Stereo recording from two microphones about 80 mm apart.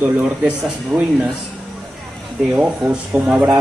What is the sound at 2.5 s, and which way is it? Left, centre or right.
Speech, centre.